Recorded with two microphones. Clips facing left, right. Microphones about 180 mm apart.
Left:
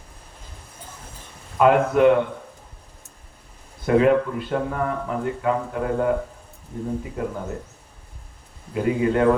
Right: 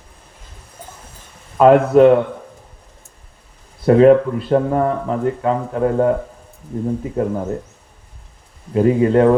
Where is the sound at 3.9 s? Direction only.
35° right (ahead or behind).